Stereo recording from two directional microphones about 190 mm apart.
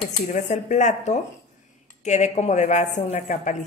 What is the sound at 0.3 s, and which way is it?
Speech, 40° left (ahead or behind).